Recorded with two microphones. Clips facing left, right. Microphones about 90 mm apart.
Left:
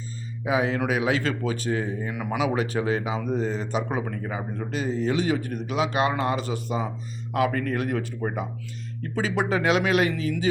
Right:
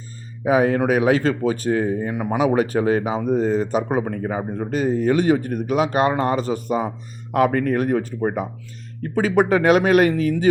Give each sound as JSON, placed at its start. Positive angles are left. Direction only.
{"t": 0.4, "sound": "speech", "side_deg": -45}
{"t": 9.2, "sound": "speech", "side_deg": -50}